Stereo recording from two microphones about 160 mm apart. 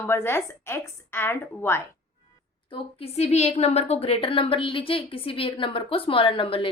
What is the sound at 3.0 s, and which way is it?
A woman's voice, 40° left (ahead or behind).